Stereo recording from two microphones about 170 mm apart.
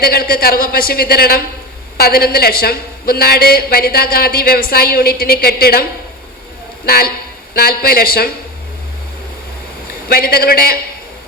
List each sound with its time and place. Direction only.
0.0 s a woman's voice: 60° left (ahead or behind)
6.8 s a woman's voice: 65° left (ahead or behind)
10.1 s a woman's voice: 65° left (ahead or behind)